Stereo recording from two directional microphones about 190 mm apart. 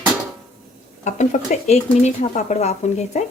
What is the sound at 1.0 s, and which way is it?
Speech, 40° left (ahead or behind).